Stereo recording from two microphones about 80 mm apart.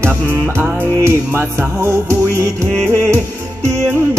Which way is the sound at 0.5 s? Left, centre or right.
Right.